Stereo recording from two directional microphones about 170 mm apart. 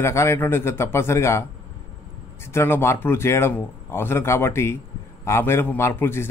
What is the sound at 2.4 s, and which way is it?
A man's voice, 15° left (ahead or behind).